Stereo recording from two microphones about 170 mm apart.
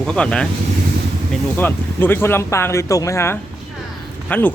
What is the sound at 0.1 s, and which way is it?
Speech, 5° left (ahead or behind).